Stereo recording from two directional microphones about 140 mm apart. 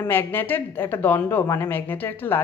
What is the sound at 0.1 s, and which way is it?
Speech, 15° left (ahead or behind).